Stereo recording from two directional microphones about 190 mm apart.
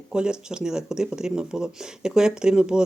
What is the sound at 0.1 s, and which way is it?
Speech, 5° right (ahead or behind).